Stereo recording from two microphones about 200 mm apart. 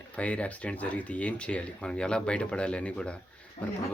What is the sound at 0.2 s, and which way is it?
Speech, 5° left (ahead or behind).